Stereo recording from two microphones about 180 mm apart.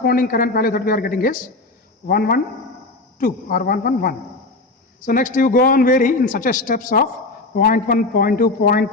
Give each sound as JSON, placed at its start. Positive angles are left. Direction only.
{"t": 0.0, "sound": "a man's voice", "side_deg": 55}